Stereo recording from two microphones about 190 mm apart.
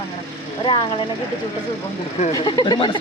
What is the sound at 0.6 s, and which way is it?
Speech, 25° left (ahead or behind).